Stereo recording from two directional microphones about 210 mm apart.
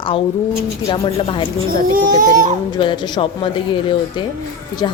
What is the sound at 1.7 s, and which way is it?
Speech, 40° right (ahead or behind).